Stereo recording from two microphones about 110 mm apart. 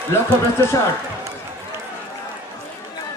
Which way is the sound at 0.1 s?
25° left (ahead or behind).